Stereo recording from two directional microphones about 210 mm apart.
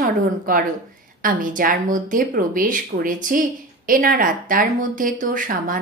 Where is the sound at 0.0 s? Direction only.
40° right (ahead or behind).